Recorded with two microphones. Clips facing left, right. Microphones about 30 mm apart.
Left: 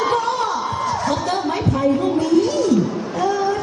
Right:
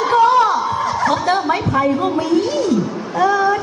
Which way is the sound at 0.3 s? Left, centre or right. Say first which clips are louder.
Right 7 dB; right.